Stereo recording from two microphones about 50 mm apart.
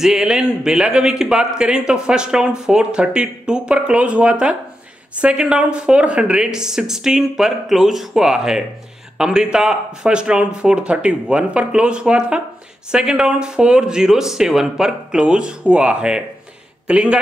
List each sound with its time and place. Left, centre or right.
0.0 s a man's voice: centre